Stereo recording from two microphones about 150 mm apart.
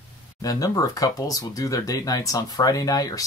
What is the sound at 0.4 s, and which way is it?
Speech, 25° left (ahead or behind).